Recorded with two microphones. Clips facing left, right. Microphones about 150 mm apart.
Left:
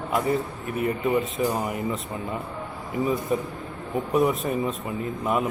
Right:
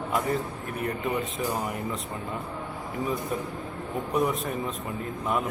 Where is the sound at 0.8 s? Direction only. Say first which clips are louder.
Left 6 dB; centre (ahead or behind).